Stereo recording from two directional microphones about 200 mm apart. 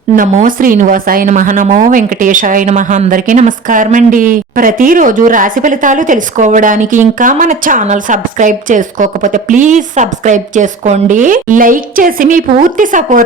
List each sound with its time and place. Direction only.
0.2 s a woman's voice: 40° right (ahead or behind)